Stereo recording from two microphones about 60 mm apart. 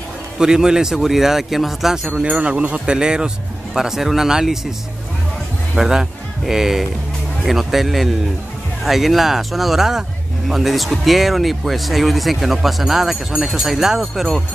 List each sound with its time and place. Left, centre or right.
0.4 s speech: centre
2.2 s speech: centre
5.8 s speech: centre